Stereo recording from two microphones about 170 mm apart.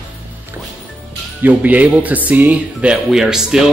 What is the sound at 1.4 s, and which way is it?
Speech, 10° right (ahead or behind).